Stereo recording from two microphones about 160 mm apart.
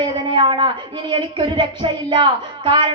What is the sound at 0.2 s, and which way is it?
A woman's voice, 30° right (ahead or behind).